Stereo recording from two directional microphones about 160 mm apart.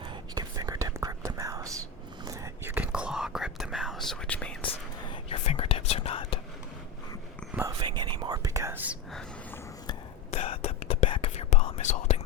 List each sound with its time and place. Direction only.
0.0 s whispering: 30° right (ahead or behind); by 4.5 s 5° left (ahead or behind)
4.6 s whispering: 30° left (ahead or behind)
7.8 s whispering: 30° right (ahead or behind); by 9.0 s 10° right (ahead or behind)
10.3 s whispering: 40° left (ahead or behind)